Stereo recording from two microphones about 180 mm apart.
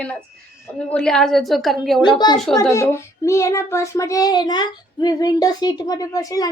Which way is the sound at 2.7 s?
15° left (ahead or behind).